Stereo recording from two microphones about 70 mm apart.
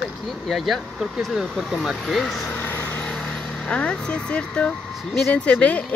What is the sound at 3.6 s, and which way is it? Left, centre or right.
Speech, centre.